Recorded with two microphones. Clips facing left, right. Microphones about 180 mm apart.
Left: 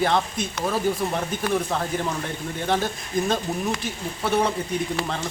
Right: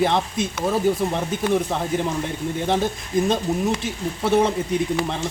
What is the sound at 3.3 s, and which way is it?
Speech, 25° right (ahead or behind).